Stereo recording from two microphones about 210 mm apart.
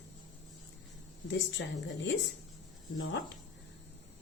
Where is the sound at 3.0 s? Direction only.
60° left (ahead or behind).